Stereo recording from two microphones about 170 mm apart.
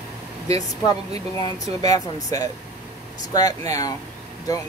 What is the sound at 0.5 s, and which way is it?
Speech, 20° left (ahead or behind).